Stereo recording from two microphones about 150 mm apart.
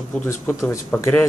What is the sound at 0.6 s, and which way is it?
Speech, 20° left (ahead or behind).